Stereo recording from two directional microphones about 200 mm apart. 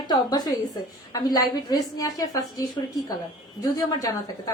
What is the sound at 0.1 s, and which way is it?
A woman's voice, 20° left (ahead or behind).